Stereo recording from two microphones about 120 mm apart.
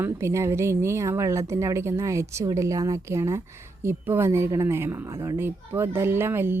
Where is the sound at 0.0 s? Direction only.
20° right (ahead or behind).